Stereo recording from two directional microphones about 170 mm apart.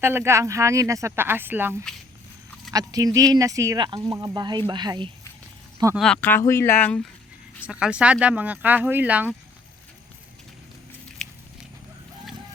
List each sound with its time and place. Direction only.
0.0 s speech: 15° right (ahead or behind)
6.0 s speech: 5° left (ahead or behind)
7.6 s speech: 5° right (ahead or behind)